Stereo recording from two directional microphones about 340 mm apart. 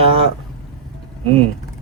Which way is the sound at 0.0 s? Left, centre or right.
Centre.